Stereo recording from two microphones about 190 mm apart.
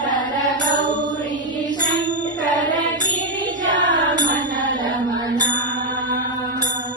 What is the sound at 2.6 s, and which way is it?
Music, 45° right (ahead or behind).